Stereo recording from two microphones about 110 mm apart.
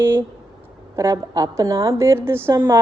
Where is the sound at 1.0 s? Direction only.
30° right (ahead or behind).